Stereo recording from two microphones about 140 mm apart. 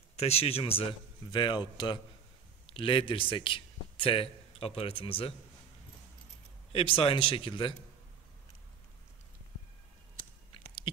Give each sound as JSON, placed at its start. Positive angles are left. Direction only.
{"t": 0.1, "sound": "a man's voice", "side_deg": 45}
{"t": 6.7, "sound": "speech", "side_deg": 40}